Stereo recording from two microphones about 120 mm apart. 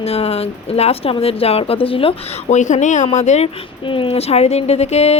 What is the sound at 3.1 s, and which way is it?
Speech, 75° left (ahead or behind).